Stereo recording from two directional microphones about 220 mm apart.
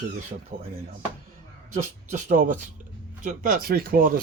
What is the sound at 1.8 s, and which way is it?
Speech, 30° right (ahead or behind).